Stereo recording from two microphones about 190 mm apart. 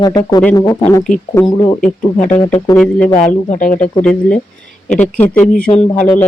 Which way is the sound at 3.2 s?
40° left (ahead or behind).